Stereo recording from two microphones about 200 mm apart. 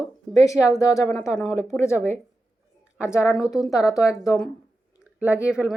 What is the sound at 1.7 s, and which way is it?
Speech, 15° left (ahead or behind).